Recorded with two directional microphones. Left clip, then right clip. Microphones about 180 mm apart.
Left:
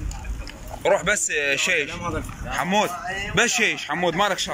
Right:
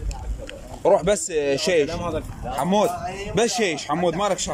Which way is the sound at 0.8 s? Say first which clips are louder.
Right 2 dB; 30° right (ahead or behind).